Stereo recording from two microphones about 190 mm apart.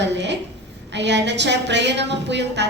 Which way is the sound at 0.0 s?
65° right (ahead or behind).